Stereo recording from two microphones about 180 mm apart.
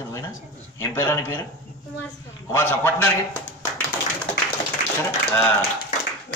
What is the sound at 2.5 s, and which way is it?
A man's voice, 10° left (ahead or behind).